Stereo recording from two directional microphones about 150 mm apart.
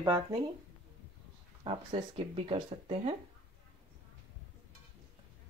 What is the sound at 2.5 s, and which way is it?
Speech, 35° right (ahead or behind).